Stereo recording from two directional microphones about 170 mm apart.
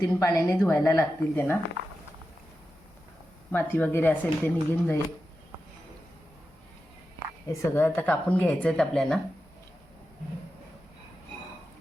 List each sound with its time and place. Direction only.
0.0 s a woman's voice: 20° left (ahead or behind)
3.5 s a woman's voice: 10° left (ahead or behind)
7.4 s a woman's voice: 15° left (ahead or behind)